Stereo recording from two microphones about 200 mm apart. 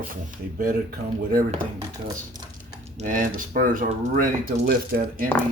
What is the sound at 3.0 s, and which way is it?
Speech, 40° right (ahead or behind).